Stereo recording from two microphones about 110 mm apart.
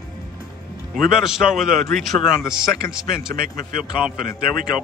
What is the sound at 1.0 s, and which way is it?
Speech, 5° right (ahead or behind).